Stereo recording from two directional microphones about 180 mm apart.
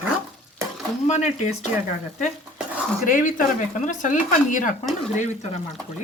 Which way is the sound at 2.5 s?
5° right (ahead or behind).